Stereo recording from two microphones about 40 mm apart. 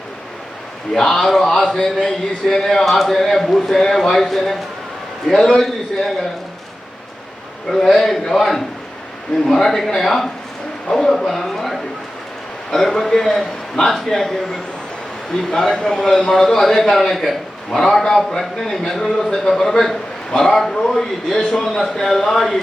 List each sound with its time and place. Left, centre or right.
0.9 s speech: centre
1.2 s a man's voice: centre
7.7 s speech: centre
15.5 s a man's voice: centre